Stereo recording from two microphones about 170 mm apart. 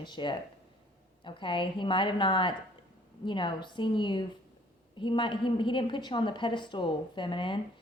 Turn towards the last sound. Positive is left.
turn(degrees=30)  # may be behind; listen again after turning